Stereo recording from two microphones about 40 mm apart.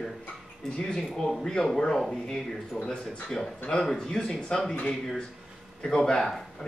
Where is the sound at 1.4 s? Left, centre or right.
Centre.